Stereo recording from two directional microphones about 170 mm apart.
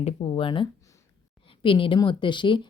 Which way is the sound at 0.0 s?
30° left (ahead or behind).